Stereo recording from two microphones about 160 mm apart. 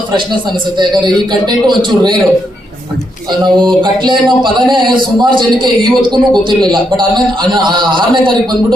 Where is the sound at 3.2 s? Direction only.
25° right (ahead or behind).